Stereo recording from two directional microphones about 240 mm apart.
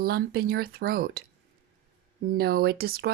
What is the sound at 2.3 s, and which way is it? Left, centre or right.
Speech, right.